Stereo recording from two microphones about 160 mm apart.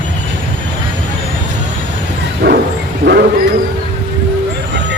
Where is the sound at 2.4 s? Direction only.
90° right.